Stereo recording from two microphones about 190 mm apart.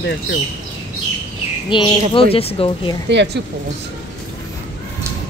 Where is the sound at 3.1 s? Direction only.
65° right (ahead or behind).